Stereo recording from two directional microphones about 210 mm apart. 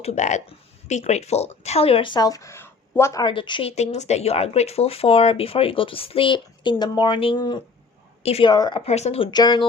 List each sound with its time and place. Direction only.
0.0 s a woman's voice: 30° left (ahead or behind)